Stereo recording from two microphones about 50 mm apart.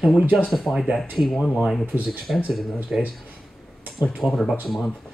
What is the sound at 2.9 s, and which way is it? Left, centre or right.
Speech, centre.